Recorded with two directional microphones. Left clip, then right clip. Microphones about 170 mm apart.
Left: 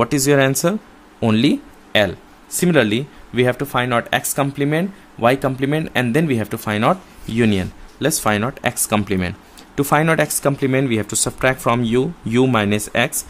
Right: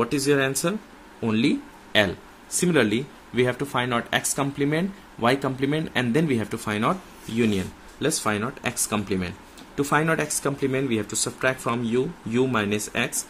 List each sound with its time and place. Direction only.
0.0 s speech: 40° left (ahead or behind)